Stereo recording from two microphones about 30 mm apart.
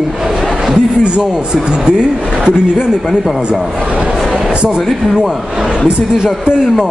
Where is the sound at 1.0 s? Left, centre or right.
Right.